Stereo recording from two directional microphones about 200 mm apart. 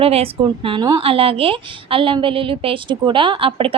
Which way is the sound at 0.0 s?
30° right (ahead or behind).